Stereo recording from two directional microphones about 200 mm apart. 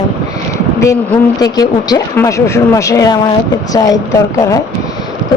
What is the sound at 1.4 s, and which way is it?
Speech, 20° left (ahead or behind).